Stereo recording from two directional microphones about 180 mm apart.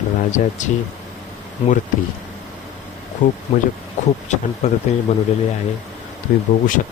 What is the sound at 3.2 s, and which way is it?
Speech, 45° left (ahead or behind).